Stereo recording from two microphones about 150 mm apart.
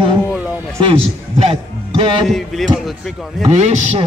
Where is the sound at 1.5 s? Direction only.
40° right (ahead or behind).